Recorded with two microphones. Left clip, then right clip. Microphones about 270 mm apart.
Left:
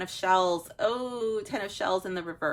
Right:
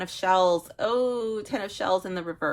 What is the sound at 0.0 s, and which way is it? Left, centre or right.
Speech, right.